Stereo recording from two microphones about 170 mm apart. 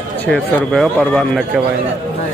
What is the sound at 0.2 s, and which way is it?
Speech, 10° left (ahead or behind).